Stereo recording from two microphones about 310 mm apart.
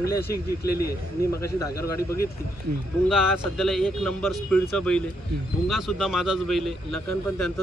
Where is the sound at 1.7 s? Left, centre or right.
Left.